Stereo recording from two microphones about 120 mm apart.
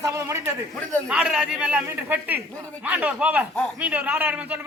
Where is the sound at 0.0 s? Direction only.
25° right (ahead or behind).